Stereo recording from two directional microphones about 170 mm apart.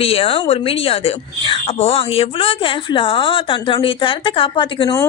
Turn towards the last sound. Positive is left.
turn(degrees=25)  # may be behind; listen again after turning